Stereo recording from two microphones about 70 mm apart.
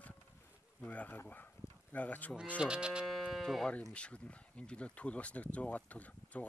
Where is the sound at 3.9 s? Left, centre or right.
Centre.